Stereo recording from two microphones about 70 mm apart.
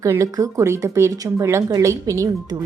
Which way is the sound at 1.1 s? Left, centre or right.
Right.